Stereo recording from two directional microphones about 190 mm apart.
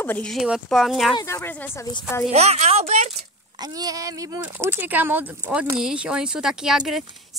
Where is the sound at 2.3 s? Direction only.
35° right (ahead or behind).